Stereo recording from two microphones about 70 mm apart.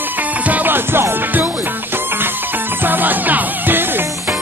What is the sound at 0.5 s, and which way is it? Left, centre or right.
Music, right.